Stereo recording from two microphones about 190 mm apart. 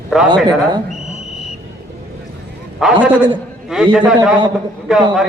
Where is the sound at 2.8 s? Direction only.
5° right (ahead or behind).